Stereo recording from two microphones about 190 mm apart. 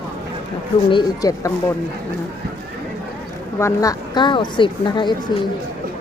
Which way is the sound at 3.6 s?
15° left (ahead or behind).